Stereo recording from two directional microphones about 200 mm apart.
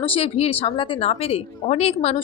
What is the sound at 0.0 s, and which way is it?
A woman's voice, 30° left (ahead or behind).